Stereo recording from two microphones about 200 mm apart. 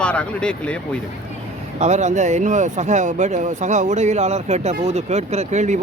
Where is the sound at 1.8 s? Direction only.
35° right (ahead or behind).